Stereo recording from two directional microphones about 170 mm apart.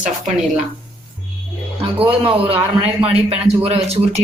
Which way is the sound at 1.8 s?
35° right (ahead or behind).